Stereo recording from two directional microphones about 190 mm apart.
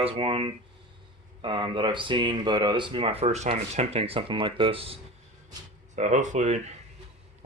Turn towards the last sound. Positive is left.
turn(degrees=-35)  # may be behind; listen again after turning